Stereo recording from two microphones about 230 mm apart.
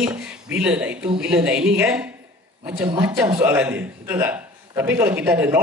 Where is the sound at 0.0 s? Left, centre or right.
Centre.